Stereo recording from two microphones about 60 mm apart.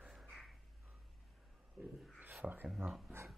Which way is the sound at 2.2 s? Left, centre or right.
Right.